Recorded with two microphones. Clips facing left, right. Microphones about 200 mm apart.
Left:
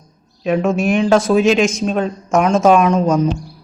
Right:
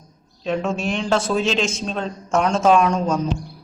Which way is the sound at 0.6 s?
10° left (ahead or behind).